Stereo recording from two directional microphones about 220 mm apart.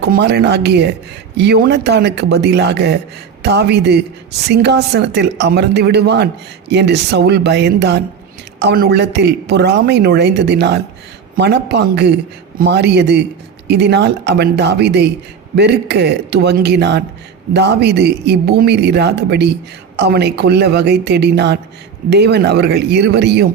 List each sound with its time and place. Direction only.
0.0 s a woman's voice: 50° right (ahead or behind)